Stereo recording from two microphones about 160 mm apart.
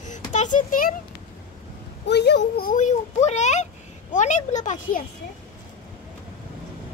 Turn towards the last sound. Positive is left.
turn(degrees=50)  # may be behind; listen again after turning